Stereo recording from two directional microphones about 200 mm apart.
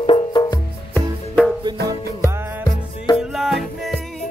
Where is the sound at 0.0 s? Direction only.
25° left (ahead or behind).